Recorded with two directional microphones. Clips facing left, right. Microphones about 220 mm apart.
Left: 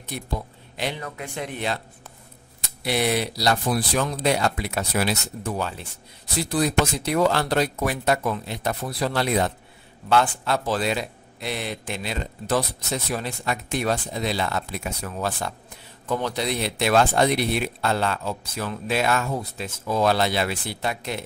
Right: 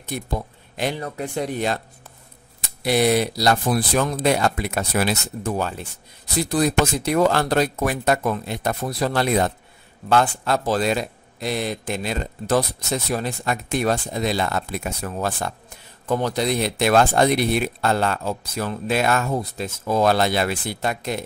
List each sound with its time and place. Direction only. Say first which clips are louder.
0.1 s speech: right 3 dB; 50° right (ahead or behind)